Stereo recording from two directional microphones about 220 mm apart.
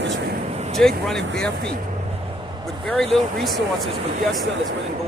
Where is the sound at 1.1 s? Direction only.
5° left (ahead or behind).